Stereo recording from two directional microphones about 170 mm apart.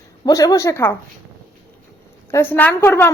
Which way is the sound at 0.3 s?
20° left (ahead or behind).